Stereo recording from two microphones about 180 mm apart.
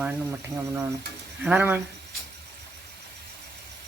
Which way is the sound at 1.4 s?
10° right (ahead or behind).